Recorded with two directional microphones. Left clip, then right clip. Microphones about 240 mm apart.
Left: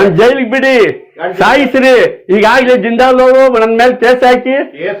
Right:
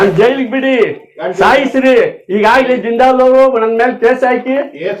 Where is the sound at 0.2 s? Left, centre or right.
Left.